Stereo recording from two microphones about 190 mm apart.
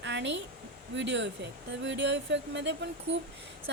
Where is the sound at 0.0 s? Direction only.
70° right (ahead or behind).